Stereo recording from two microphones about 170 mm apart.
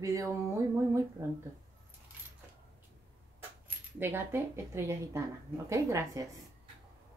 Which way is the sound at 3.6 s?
15° right (ahead or behind).